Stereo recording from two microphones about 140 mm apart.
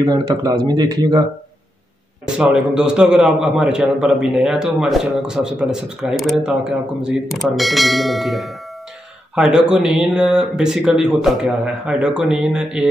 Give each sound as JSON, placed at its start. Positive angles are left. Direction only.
{"t": 0.0, "sound": "speech", "side_deg": -30}
{"t": 2.3, "sound": "a man's voice", "side_deg": -5}